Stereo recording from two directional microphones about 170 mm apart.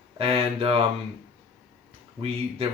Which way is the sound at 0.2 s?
35° right (ahead or behind).